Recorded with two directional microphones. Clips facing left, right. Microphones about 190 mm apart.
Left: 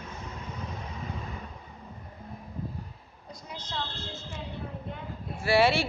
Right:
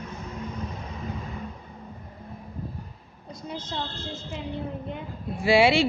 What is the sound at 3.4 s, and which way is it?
Speech, 25° right (ahead or behind).